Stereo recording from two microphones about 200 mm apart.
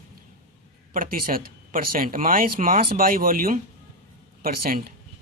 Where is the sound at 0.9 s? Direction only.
45° right (ahead or behind).